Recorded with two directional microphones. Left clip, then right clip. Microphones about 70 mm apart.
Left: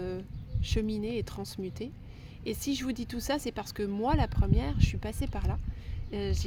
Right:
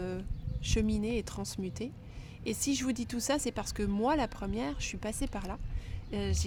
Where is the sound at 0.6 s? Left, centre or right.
Right.